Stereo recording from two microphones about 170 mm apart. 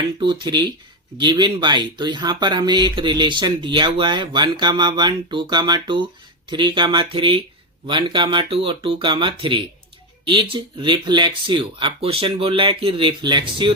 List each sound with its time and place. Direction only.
0.2 s speech: 25° right (ahead or behind)